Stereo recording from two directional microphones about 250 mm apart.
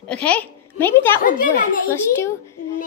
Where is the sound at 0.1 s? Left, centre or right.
Centre.